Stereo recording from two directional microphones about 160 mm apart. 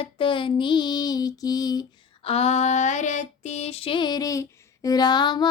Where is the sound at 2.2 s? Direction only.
40° left (ahead or behind).